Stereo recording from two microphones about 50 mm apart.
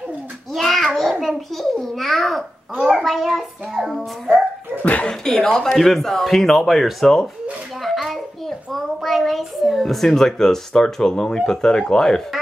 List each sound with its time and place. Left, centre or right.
0.5 s child singing: centre
1.2 s speech: centre
4.8 s speech: left
5.2 s a child's voice: centre